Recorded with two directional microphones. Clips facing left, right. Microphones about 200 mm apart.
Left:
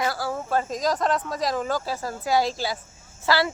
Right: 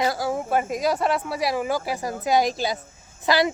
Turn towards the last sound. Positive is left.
turn(degrees=-15)  # may be behind; listen again after turning